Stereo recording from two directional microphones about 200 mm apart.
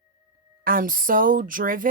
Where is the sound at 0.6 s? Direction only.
45° right (ahead or behind).